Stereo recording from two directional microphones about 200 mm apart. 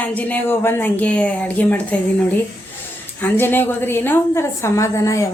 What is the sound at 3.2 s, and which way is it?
Speech, 10° left (ahead or behind).